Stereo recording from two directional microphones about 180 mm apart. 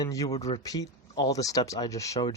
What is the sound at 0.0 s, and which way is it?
Speech, 20° left (ahead or behind).